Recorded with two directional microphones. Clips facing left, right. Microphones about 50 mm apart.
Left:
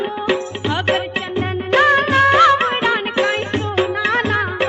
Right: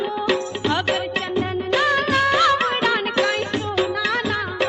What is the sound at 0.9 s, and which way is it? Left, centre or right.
Music of bollywood, left.